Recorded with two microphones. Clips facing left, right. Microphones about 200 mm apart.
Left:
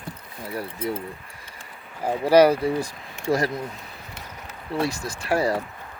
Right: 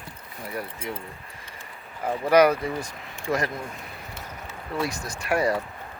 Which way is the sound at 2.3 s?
30° left (ahead or behind).